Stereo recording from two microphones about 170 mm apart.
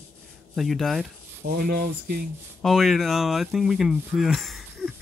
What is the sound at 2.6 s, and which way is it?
Speech, centre (ahead or behind).